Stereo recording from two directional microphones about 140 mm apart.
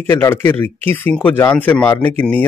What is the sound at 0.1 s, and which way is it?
Speech, 15° left (ahead or behind).